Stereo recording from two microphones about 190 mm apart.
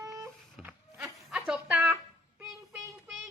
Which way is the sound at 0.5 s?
5° right (ahead or behind).